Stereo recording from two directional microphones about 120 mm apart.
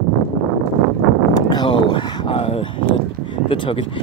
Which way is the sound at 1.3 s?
40° left (ahead or behind).